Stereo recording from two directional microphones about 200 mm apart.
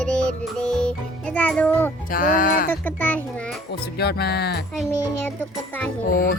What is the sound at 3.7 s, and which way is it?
Speech, 55° left (ahead or behind).